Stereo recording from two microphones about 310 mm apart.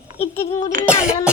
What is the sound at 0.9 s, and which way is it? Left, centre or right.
Speech, centre.